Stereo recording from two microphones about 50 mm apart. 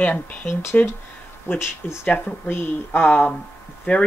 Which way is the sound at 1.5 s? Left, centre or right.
Left.